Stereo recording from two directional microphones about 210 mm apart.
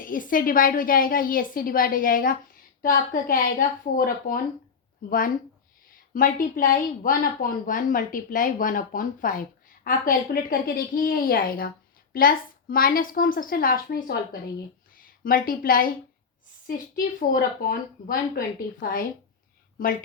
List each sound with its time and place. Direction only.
0.0 s a woman's voice: 40° left (ahead or behind)